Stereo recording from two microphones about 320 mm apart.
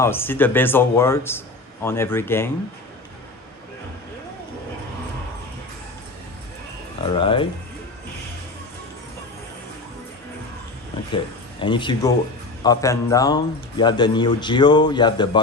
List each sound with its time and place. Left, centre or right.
0.0 s a man's voice: centre
7.1 s a man's voice: centre
11.6 s a man's voice: centre